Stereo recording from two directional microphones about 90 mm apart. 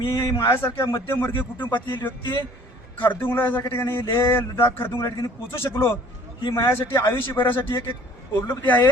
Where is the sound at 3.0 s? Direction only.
20° left (ahead or behind).